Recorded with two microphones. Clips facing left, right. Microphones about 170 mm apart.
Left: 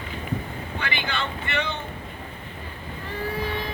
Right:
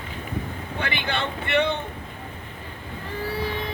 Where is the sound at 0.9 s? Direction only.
60° right (ahead or behind).